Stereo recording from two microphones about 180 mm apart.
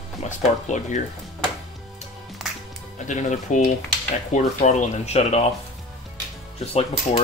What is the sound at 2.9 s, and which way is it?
Speech, 40° left (ahead or behind).